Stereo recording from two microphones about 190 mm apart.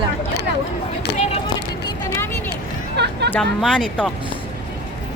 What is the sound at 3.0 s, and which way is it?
Music, 60° right (ahead or behind).